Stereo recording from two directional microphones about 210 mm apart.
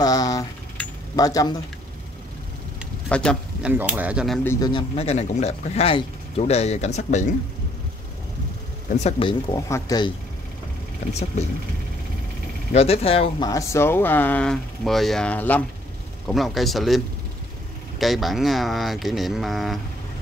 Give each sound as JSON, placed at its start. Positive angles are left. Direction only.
{"t": 0.0, "sound": "a sound", "side_deg": 15}
{"t": 1.1, "sound": "speech", "side_deg": 15}
{"t": 3.1, "sound": "speech", "side_deg": 5}
{"t": 3.7, "sound": "speech", "side_deg": -10}
{"t": 4.5, "sound": "speech", "side_deg": 20}
{"t": 8.9, "sound": "speech", "side_deg": 30}
{"t": 12.7, "sound": "speech", "side_deg": 30}
{"t": 13.5, "sound": "speech", "side_deg": 15}